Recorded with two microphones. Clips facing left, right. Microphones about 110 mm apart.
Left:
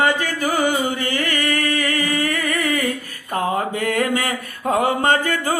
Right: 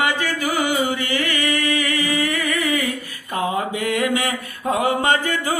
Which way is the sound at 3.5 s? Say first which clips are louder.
Left 1 dB; 50° left (ahead or behind).